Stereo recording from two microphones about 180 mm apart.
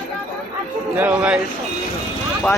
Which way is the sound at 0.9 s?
10° right (ahead or behind).